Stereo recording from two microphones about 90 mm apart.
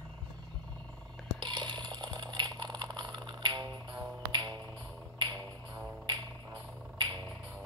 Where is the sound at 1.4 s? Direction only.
60° right (ahead or behind).